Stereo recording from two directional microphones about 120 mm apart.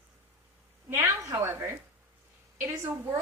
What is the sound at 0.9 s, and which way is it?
A woman's voice, 30° right (ahead or behind).